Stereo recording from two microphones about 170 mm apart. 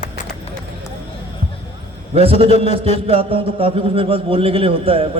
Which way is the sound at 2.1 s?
35° right (ahead or behind).